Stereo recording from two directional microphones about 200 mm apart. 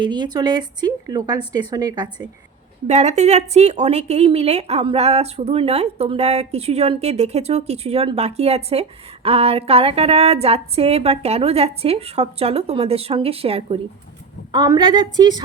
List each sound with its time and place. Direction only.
0.0 s a woman's voice: 20° right (ahead or behind)
2.8 s a woman's voice: 35° right (ahead or behind)